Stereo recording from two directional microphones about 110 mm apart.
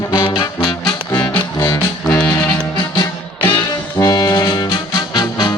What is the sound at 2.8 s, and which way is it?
Music, 40° left (ahead or behind).